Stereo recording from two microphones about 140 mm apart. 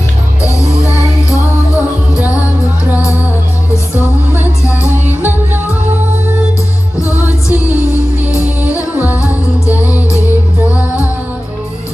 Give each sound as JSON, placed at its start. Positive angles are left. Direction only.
{"t": 0.4, "sound": "music", "side_deg": 20}
{"t": 4.9, "sound": "music", "side_deg": -15}
{"t": 7.0, "sound": "music", "side_deg": 20}
{"t": 9.0, "sound": "music", "side_deg": -15}